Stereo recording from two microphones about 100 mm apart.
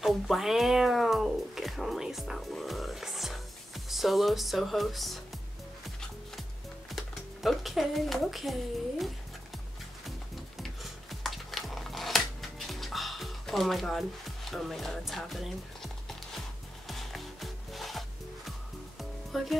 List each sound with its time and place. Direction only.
0.0 s cat: centre (ahead or behind)
6.9 s speech: centre (ahead or behind)
10.6 s a sound: centre (ahead or behind)
16.8 s music: centre (ahead or behind)
19.3 s speech: centre (ahead or behind)